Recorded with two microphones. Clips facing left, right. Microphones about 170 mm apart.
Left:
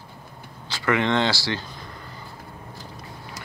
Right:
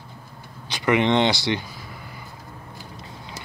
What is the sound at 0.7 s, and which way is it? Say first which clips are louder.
Speech: right 3 dB; 20° right (ahead or behind).